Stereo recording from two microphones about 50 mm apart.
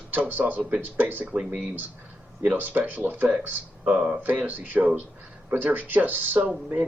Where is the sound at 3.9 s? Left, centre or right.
Centre.